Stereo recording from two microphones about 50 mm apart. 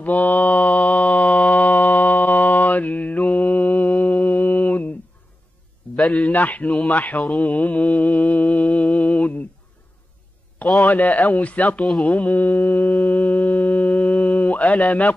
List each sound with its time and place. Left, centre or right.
0.0 s mantra: left
6.1 s mantra: left
10.8 s mantra: left